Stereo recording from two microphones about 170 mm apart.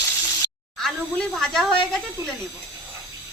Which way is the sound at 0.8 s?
5° left (ahead or behind).